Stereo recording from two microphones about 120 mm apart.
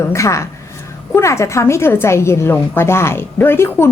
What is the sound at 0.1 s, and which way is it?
A woman's voice, 25° left (ahead or behind).